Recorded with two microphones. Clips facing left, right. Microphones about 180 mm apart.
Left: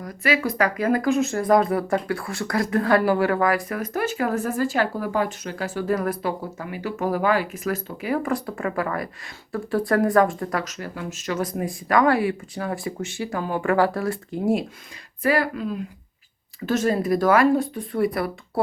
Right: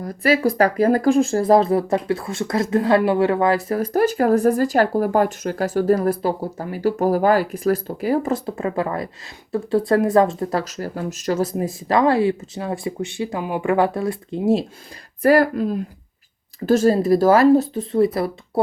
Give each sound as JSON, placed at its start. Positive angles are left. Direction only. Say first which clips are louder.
{"t": 0.0, "sound": "speech", "louder": "right 5 dB", "side_deg": -35}
{"t": 8.2, "sound": "speech", "louder": "right 3 dB", "side_deg": -25}
{"t": 15.2, "sound": "speech", "louder": "right 7 dB", "side_deg": -40}